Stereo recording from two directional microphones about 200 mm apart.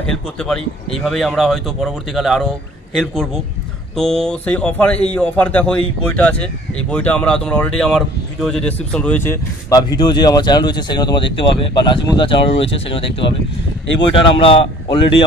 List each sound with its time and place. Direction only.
0.4 s a man's voice: 5° left (ahead or behind); by 15.2 s 25° left (ahead or behind)